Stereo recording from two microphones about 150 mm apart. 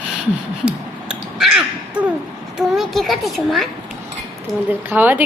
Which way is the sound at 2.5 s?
Centre (ahead or behind).